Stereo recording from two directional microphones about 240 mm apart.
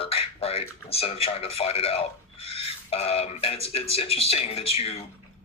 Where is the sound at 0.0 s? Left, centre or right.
Left.